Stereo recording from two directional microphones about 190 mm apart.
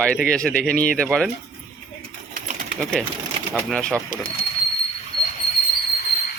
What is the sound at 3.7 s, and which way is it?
Speech, 5° left (ahead or behind).